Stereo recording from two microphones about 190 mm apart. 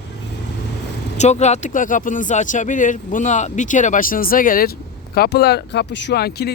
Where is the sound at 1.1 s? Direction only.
35° left (ahead or behind).